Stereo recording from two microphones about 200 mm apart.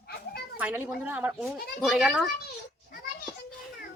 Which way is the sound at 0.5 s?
10° right (ahead or behind).